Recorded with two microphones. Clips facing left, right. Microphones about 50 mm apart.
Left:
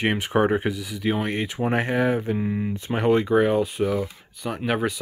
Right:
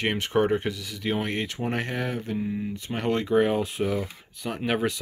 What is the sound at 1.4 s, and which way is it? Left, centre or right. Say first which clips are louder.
Speech: left 5 dB; centre.